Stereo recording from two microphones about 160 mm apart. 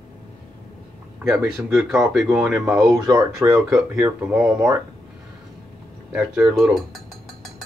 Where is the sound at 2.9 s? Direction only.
20° right (ahead or behind).